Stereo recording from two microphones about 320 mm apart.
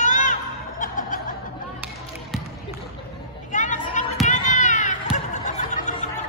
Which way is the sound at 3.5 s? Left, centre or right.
Left.